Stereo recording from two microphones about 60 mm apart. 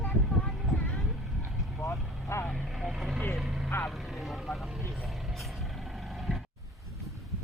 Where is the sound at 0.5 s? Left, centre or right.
Centre.